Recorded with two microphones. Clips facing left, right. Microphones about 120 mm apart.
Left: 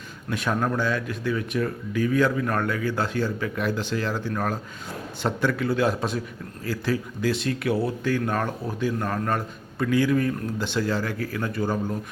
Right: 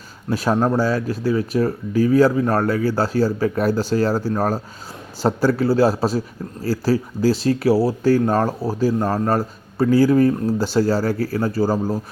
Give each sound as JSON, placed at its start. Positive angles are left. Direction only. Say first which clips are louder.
{"t": 0.3, "sound": "speech", "louder": "right 7 dB", "side_deg": -35}